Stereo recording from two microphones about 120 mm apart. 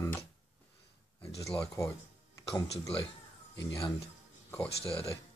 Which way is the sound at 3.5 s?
30° left (ahead or behind).